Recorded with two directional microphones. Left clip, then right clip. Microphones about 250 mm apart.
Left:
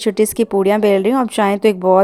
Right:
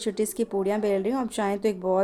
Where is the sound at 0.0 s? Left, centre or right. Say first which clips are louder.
Left 11 dB; left.